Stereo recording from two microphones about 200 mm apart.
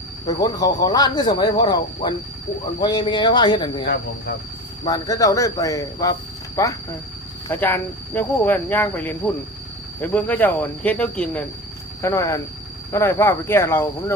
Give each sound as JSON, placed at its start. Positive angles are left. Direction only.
{"t": 0.3, "sound": "speech", "side_deg": 20}
{"t": 4.9, "sound": "speech", "side_deg": 15}